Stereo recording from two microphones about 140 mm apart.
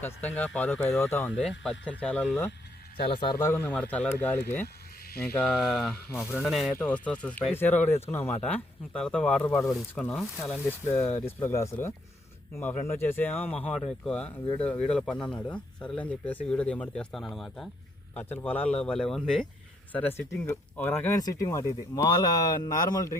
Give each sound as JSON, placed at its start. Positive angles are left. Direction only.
{"t": 0.0, "sound": "speech", "side_deg": 10}
{"t": 3.0, "sound": "a man's voice", "side_deg": 40}
{"t": 3.5, "sound": "speech", "side_deg": 15}
{"t": 6.7, "sound": "speech", "side_deg": 10}
{"t": 10.7, "sound": "speech", "side_deg": 15}
{"t": 18.1, "sound": "speech", "side_deg": 10}
{"t": 21.2, "sound": "speech", "side_deg": 25}